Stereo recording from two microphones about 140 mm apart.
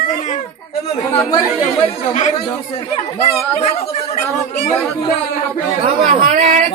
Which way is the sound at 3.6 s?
50° left (ahead or behind).